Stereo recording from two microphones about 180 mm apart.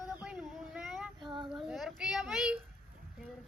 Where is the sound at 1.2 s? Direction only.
25° right (ahead or behind).